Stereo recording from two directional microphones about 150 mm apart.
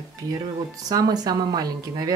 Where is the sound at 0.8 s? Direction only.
25° right (ahead or behind).